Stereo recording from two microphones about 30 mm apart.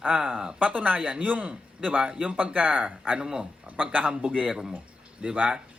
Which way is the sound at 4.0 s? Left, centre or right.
Right.